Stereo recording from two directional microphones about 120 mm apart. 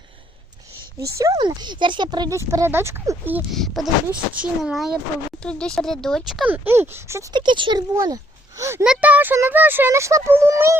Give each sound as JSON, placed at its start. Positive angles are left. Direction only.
{"t": 0.9, "sound": "speech", "side_deg": -25}
{"t": 1.4, "sound": "speech", "side_deg": -40}
{"t": 2.5, "sound": "speech", "side_deg": -20}
{"t": 3.5, "sound": "speech", "side_deg": 0}
{"t": 5.4, "sound": "speech", "side_deg": 5}
{"t": 6.4, "sound": "speech", "side_deg": -15}
{"t": 7.3, "sound": "speech", "side_deg": -40}
{"t": 8.8, "sound": "a child's voice", "side_deg": -10}